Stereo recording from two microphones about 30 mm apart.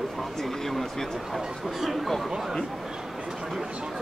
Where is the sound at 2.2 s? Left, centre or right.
Centre.